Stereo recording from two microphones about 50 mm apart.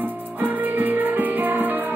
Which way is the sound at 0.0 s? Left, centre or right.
Right.